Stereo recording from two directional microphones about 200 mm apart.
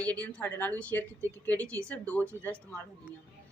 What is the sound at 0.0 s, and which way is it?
A woman's voice, 5° left (ahead or behind).